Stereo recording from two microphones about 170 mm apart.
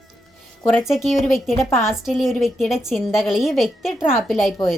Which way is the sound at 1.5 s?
15° left (ahead or behind).